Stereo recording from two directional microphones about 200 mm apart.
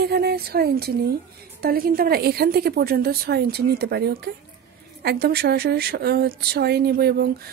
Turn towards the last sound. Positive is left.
turn(degrees=-55)  # may be behind; listen again after turning